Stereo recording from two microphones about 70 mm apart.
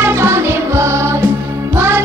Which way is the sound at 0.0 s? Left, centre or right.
Right.